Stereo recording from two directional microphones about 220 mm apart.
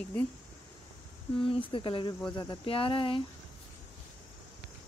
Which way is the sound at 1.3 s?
25° left (ahead or behind).